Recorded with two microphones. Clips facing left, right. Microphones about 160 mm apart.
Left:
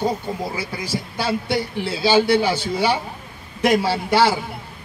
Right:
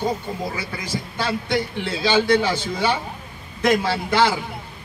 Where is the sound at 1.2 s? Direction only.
10° left (ahead or behind).